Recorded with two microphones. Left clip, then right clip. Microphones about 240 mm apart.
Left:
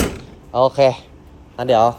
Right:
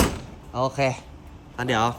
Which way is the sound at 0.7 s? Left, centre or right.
Left.